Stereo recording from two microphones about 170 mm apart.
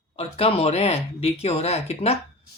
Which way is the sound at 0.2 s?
35° left (ahead or behind).